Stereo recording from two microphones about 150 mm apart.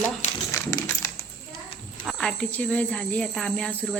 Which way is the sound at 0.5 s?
20° left (ahead or behind).